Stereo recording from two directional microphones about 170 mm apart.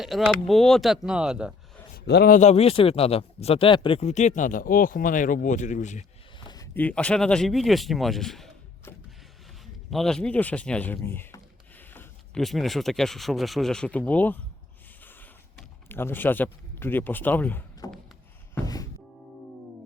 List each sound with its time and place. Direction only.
0.0 s speech: centre (ahead or behind)
2.0 s a man's voice: 75° left (ahead or behind)
2.3 s speech: 40° left (ahead or behind)
6.7 s speech: 10° left (ahead or behind)
9.9 s speech: 5° left (ahead or behind)
15.9 s speech: 10° left (ahead or behind)
17.8 s a sound: 20° left (ahead or behind)
18.5 s music: 20° left (ahead or behind)